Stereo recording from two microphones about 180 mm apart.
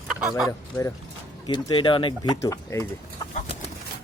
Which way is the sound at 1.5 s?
25° left (ahead or behind).